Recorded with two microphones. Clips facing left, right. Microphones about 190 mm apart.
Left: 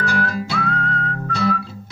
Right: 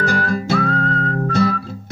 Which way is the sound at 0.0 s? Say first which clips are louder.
Right 3 dB; 45° right (ahead or behind).